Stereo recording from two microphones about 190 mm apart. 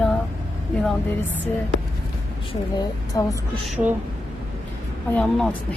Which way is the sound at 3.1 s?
15° left (ahead or behind).